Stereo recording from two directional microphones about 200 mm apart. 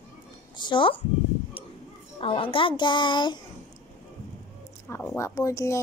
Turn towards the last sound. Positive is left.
turn(degrees=15)  # may be behind; listen again after turning